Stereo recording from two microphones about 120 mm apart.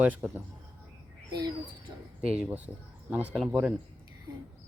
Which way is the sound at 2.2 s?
5° right (ahead or behind).